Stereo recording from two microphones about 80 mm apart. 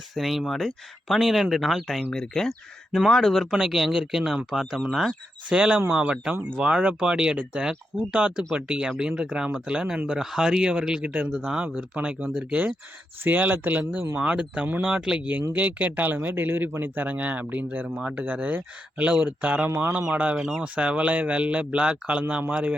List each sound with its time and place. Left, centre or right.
0.1 s speech: centre
5.5 s speech: centre